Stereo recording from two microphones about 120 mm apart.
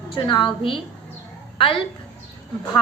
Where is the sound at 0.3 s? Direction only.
40° left (ahead or behind).